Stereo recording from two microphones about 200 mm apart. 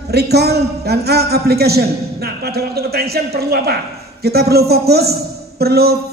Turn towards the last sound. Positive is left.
turn(degrees=-50)  # may be behind; listen again after turning